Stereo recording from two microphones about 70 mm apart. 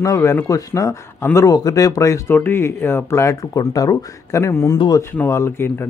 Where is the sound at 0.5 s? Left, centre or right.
Left.